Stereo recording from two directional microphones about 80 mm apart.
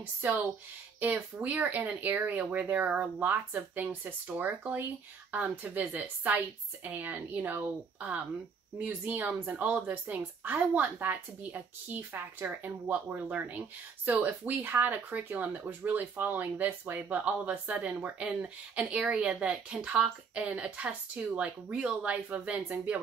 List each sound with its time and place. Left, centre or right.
0.0 s speech: right